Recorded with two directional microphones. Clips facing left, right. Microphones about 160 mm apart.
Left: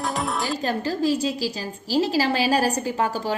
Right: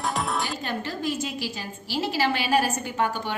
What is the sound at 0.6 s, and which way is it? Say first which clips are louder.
A woman's voice: left 6 dB; 35° left (ahead or behind).